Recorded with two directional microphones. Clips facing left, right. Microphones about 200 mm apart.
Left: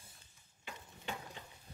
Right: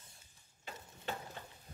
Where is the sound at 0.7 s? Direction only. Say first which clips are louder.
Right 2 dB; 40° right (ahead or behind).